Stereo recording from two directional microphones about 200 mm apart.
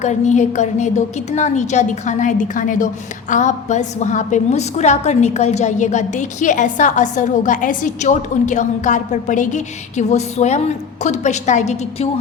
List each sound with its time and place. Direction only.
0.0 s a woman's voice: 35° left (ahead or behind)